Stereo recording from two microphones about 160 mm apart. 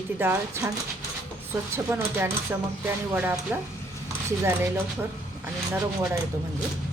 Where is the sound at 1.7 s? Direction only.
15° right (ahead or behind).